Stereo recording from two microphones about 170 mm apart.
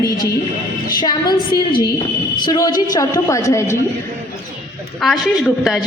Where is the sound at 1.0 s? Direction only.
25° left (ahead or behind).